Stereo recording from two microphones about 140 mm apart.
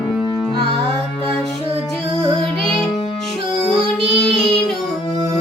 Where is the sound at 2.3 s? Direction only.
40° right (ahead or behind).